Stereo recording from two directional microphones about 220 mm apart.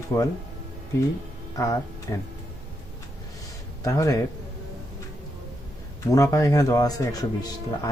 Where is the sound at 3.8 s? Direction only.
15° left (ahead or behind).